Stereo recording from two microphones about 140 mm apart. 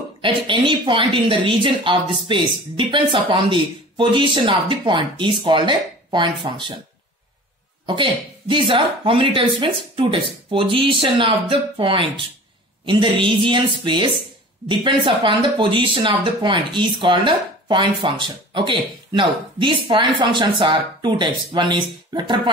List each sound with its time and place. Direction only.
0.2 s speech: 35° right (ahead or behind)
7.8 s speech: 35° right (ahead or behind)